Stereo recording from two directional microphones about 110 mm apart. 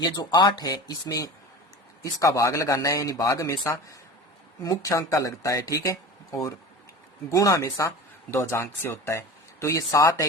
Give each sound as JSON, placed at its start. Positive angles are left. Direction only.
{"t": 0.0, "sound": "speech", "side_deg": 35}